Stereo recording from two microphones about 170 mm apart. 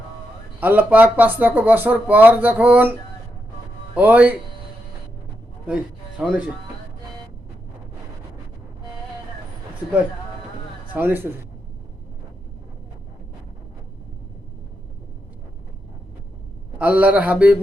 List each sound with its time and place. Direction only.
0.6 s speech: 10° right (ahead or behind)
3.9 s speech: 10° right (ahead or behind)
5.6 s speech: 5° right (ahead or behind)
10.9 s speech: 10° right (ahead or behind)
16.7 s speech: 10° right (ahead or behind)